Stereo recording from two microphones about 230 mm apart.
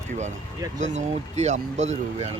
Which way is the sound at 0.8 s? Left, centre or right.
Right.